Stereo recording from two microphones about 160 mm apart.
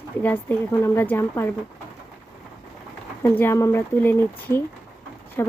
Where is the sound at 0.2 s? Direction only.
10° left (ahead or behind).